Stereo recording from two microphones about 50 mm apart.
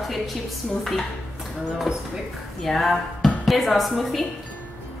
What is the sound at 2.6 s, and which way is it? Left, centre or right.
A woman's voice, centre.